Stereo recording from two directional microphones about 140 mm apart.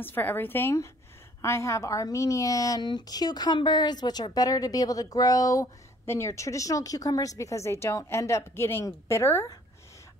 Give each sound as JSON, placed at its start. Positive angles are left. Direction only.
{"t": 0.0, "sound": "a woman's voice", "side_deg": 15}